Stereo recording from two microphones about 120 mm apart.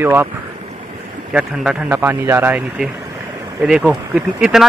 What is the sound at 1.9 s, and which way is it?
Speech, 15° right (ahead or behind).